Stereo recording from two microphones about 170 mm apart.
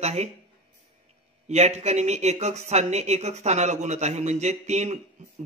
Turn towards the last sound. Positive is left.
turn(degrees=-40)  # may be behind; listen again after turning